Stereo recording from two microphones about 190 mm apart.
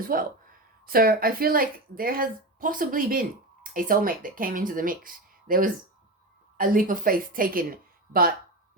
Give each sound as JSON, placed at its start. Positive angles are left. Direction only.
{"t": 0.0, "sound": "a woman's voice", "side_deg": -45}